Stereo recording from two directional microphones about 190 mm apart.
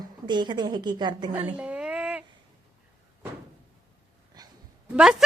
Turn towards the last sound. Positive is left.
turn(degrees=-5)  # may be behind; listen again after turning